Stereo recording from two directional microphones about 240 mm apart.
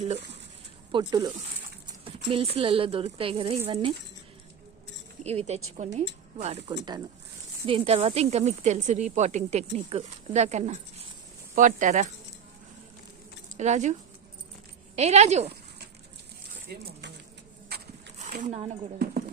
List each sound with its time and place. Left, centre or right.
0.9 s speech: centre
5.2 s speech: right
13.6 s speech: right
14.9 s speech: right
17.7 s a sound: right
18.2 s speech: right